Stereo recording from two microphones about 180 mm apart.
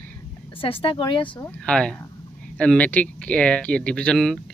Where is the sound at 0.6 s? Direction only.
30° left (ahead or behind).